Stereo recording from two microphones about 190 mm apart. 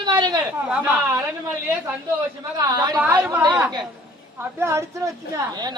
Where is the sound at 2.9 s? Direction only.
10° right (ahead or behind).